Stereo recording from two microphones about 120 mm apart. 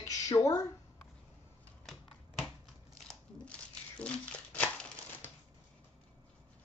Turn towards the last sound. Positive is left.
turn(degrees=15)  # may be behind; listen again after turning